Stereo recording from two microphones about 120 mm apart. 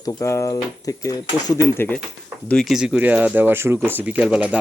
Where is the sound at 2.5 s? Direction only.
Centre (ahead or behind).